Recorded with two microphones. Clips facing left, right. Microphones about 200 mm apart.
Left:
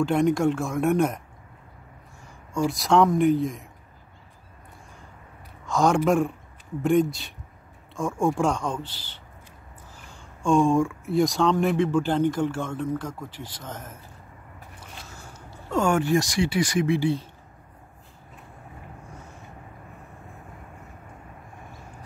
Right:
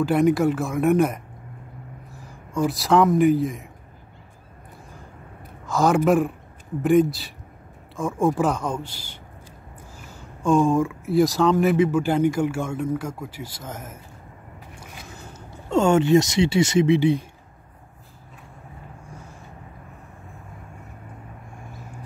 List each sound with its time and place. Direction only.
0.0 s speech: 5° right (ahead or behind)
5.7 s speech: 5° right (ahead or behind)